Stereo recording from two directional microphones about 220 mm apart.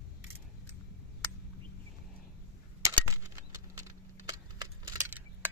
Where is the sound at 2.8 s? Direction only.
15° right (ahead or behind).